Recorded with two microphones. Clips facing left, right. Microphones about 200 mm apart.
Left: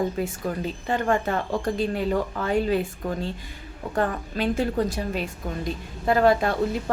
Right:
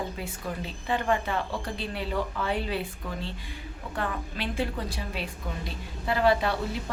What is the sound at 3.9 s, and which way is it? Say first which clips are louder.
A woman's voice: left 7 dB; 45° left (ahead or behind).